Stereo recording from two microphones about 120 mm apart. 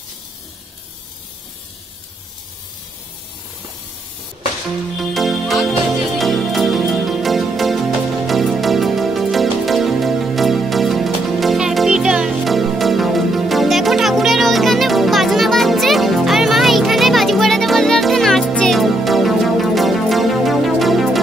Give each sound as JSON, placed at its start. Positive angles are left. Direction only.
{"t": 4.9, "sound": "music", "side_deg": 0}